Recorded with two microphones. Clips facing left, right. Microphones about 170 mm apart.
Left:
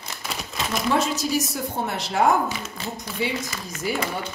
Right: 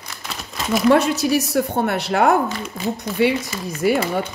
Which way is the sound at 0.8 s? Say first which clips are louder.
Right 8 dB; 65° right (ahead or behind).